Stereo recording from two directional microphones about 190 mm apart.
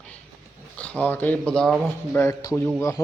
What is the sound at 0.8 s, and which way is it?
Speech, 10° left (ahead or behind).